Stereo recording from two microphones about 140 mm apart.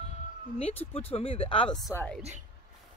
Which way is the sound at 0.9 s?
45° left (ahead or behind).